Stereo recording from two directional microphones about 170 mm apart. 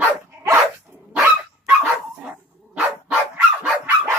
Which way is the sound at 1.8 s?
5° right (ahead or behind).